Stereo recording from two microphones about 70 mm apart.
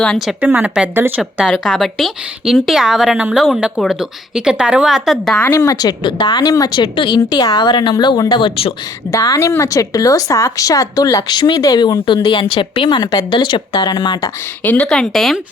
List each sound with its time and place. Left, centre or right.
0.4 s speech: right
1.2 s speech: centre
5.6 s a woman's voice: left
7.3 s a woman's voice: left
9.1 s a woman's voice: left
14.6 s a woman's voice: left
14.8 s speech: centre